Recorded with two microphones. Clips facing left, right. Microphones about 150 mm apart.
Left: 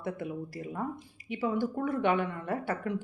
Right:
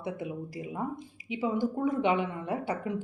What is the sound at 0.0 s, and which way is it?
Speech, 15° right (ahead or behind).